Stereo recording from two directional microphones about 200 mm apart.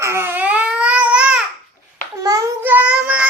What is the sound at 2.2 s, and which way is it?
Child singing, 15° right (ahead or behind).